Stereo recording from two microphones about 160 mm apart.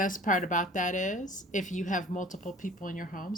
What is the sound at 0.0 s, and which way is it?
A woman's voice, 55° left (ahead or behind).